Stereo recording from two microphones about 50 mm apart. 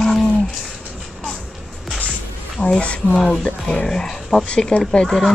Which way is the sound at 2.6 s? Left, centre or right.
Left.